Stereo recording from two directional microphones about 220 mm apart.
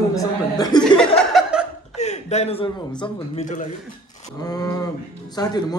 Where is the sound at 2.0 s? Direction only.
30° left (ahead or behind).